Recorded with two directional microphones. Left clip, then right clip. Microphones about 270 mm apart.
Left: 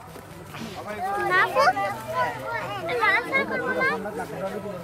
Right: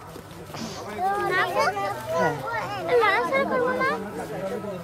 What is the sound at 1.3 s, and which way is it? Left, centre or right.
Children playing, centre.